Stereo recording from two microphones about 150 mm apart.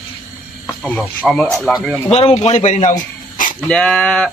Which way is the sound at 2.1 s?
45° left (ahead or behind).